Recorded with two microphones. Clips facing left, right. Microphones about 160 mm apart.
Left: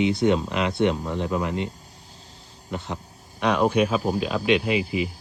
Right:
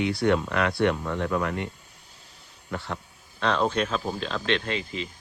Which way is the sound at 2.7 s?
20° left (ahead or behind).